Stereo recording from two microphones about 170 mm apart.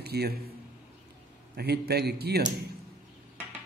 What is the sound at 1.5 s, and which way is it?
Speech, 70° right (ahead or behind).